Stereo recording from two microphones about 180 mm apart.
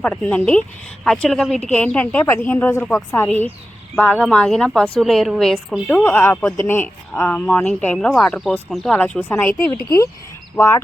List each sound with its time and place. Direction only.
0.0 s a woman's voice: 10° left (ahead or behind)